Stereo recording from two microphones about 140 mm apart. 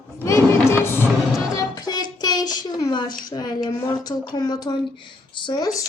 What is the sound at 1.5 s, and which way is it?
Child singing, 25° left (ahead or behind).